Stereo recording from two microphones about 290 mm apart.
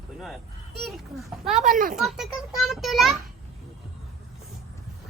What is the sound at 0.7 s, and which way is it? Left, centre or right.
Speech, centre.